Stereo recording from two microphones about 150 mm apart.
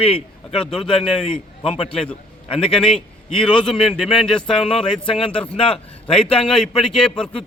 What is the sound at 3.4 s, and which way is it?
Speech, 5° left (ahead or behind).